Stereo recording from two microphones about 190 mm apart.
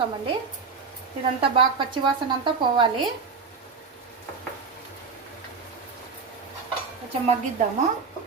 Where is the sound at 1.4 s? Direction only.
25° right (ahead or behind).